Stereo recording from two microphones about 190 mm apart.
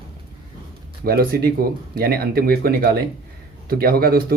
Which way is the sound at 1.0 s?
50° right (ahead or behind).